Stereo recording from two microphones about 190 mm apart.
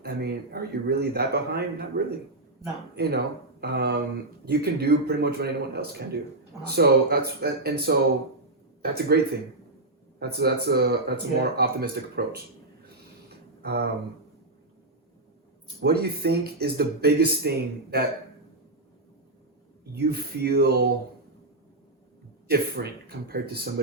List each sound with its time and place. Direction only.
0.0 s speech: 55° right (ahead or behind)
13.2 s a sound: 55° right (ahead or behind)
15.8 s speech: 55° right (ahead or behind)
20.1 s speech: 55° right (ahead or behind)
22.4 s speech: 55° right (ahead or behind)